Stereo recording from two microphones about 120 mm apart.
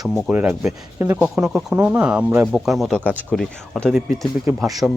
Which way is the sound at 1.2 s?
5° right (ahead or behind).